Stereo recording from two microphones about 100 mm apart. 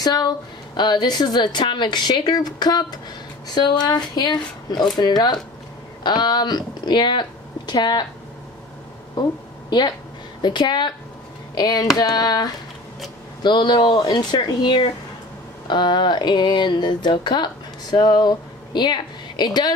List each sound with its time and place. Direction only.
0.0 s speech: 40° left (ahead or behind)
9.1 s a sound: 45° left (ahead or behind)
10.4 s speech: 45° left (ahead or behind)
11.5 s hands: 40° left (ahead or behind)
13.4 s speech: 50° left (ahead or behind)